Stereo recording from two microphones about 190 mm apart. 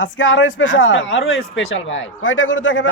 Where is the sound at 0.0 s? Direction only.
85° left.